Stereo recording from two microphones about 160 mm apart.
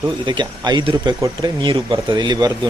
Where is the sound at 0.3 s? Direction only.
30° right (ahead or behind).